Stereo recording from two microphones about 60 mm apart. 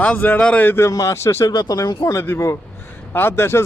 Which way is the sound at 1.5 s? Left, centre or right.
Left.